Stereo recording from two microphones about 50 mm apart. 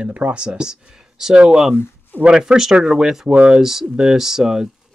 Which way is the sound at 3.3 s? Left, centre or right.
Right.